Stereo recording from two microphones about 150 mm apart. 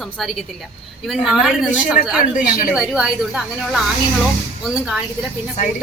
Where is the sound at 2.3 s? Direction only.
75° left (ahead or behind).